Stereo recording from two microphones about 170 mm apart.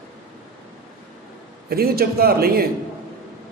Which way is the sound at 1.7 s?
65° right (ahead or behind).